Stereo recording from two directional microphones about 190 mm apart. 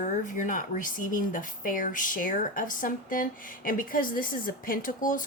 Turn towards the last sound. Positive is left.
turn(degrees=45)  # may be behind; listen again after turning